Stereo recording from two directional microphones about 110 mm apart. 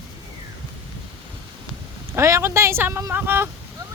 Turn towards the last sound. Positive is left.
turn(degrees=-20)  # may be behind; listen again after turning